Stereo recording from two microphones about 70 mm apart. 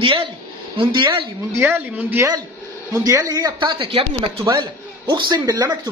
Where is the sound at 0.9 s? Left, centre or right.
Right.